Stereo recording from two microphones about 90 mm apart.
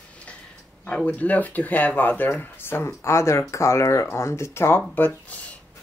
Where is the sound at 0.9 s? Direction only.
15° left (ahead or behind).